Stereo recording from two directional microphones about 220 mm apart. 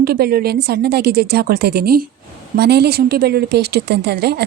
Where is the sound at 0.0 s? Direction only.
45° right (ahead or behind).